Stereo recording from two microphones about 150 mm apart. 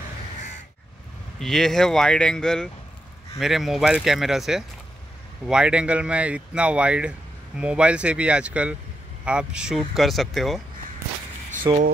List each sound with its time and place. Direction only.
1.4 s speech: centre (ahead or behind)
11.7 s speech: 25° right (ahead or behind)